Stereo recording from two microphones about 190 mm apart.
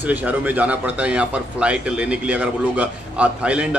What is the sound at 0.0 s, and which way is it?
Speech, 10° right (ahead or behind).